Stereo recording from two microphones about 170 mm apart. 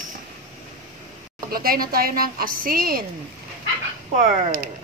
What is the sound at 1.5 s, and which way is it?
A woman's voice, 60° right (ahead or behind).